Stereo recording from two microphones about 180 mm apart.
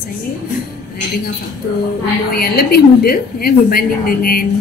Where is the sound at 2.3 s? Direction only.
55° left (ahead or behind).